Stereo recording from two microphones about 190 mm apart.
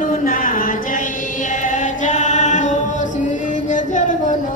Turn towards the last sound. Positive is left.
turn(degrees=40)  # may be behind; listen again after turning